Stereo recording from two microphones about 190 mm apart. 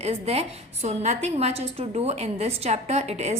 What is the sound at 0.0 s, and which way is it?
A woman's voice, 35° right (ahead or behind).